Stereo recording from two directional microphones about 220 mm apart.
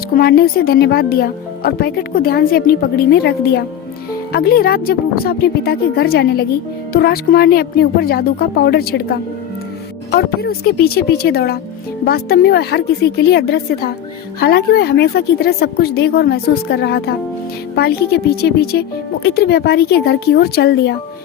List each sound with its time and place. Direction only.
0.2 s speech: 40° left (ahead or behind)